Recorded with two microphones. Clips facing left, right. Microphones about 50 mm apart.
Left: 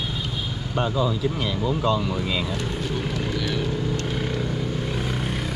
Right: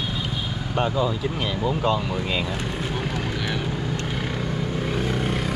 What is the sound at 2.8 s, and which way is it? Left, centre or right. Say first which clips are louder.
Vehicle: even; centre.